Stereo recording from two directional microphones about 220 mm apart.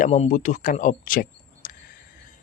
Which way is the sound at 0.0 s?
30° left (ahead or behind).